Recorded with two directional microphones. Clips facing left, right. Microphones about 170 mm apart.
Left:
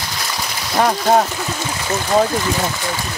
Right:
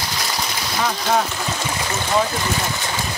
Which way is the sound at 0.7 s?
50° left (ahead or behind).